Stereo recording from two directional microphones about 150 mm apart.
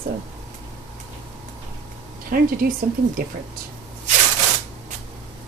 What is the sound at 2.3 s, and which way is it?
Speech, 75° right (ahead or behind).